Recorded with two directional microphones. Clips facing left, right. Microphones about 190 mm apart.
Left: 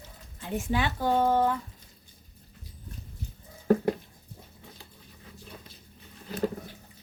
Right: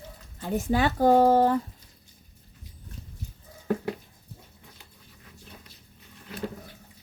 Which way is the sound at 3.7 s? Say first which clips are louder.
Left 5 dB; 40° left (ahead or behind).